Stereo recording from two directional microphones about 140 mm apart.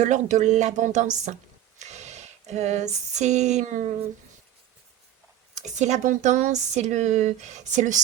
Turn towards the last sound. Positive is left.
turn(degrees=-60)  # may be behind; listen again after turning